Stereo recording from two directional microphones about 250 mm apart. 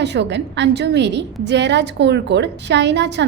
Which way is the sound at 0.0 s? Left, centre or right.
Right.